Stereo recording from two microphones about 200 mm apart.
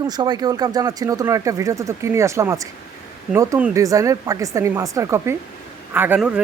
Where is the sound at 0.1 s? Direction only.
20° right (ahead or behind).